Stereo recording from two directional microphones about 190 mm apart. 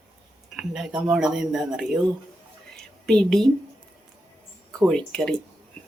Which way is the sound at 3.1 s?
5° left (ahead or behind).